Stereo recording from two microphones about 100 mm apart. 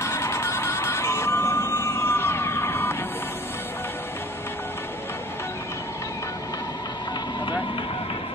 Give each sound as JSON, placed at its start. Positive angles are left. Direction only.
{"t": 0.0, "sound": "music", "side_deg": 30}